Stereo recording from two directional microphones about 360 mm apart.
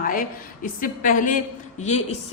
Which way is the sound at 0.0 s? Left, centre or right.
Left.